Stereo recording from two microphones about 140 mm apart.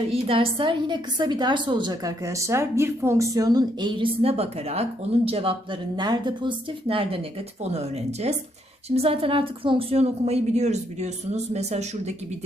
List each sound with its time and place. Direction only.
0.1 s a woman's voice: 40° right (ahead or behind)